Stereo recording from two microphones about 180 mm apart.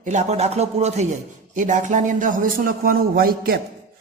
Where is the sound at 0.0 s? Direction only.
40° right (ahead or behind).